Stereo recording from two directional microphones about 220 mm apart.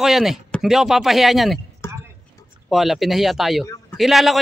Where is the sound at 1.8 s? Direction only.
10° left (ahead or behind).